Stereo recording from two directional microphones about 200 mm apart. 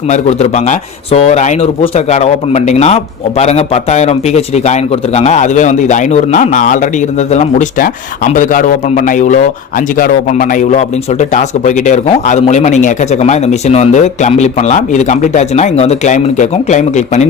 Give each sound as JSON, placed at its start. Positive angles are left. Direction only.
{"t": 0.1, "sound": "a man's voice", "side_deg": 35}